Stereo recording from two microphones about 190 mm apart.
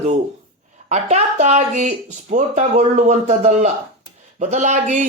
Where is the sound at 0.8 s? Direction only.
35° right (ahead or behind).